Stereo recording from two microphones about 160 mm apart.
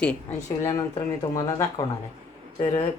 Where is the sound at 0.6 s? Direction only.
25° left (ahead or behind).